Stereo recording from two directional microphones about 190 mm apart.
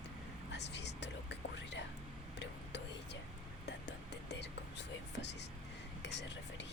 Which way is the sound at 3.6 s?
65° left (ahead or behind).